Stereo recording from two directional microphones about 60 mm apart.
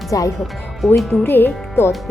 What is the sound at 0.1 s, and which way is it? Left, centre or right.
Speech, left.